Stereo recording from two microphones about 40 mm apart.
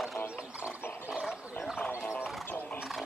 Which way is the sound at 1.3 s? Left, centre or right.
Centre.